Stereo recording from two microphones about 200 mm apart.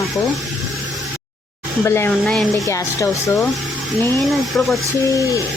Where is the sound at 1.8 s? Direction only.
10° left (ahead or behind).